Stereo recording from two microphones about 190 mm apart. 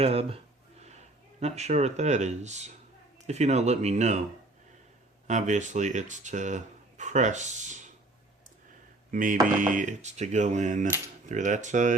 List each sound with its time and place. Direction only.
0.0 s speech: 30° right (ahead or behind)
1.4 s speech: 35° right (ahead or behind)
5.3 s speech: 40° right (ahead or behind)
9.1 s speech: 45° right (ahead or behind)